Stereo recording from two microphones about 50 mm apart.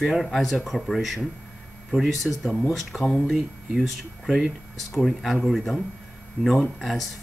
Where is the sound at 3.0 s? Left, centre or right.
Centre.